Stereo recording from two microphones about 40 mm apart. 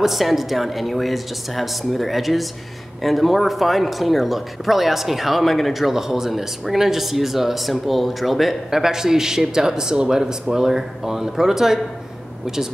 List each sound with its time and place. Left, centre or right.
0.0 s speech: centre
8.6 s a man's voice: centre